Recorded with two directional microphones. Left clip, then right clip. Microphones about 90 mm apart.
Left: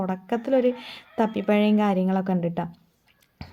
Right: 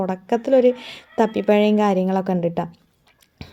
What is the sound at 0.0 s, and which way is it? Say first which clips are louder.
A woman's voice: right 6 dB; 40° right (ahead or behind).